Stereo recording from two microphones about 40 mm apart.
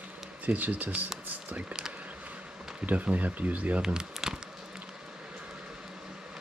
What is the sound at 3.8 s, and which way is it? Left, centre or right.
Speech, centre.